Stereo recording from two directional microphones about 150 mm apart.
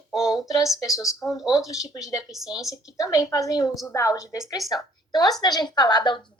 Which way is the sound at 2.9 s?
20° left (ahead or behind).